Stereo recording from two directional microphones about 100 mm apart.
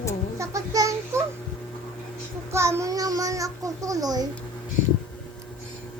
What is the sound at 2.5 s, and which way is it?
Babbling, 25° right (ahead or behind).